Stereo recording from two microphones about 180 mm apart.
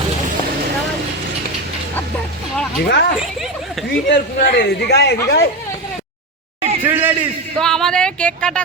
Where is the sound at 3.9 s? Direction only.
65° left (ahead or behind).